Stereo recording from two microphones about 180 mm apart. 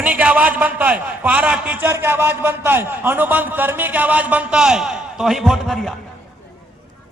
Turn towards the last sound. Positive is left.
turn(degrees=0)  # may be behind; listen again after turning